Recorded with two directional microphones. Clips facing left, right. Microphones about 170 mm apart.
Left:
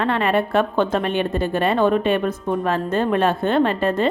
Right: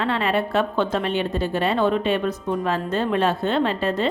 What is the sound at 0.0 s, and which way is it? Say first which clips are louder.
A woman's voice: left 3 dB; 55° left (ahead or behind).